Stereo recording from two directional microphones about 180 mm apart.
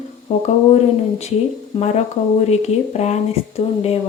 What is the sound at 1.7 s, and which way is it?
Speech, 30° left (ahead or behind).